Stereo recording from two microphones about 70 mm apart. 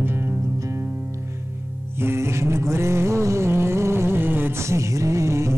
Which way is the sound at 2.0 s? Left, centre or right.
Right.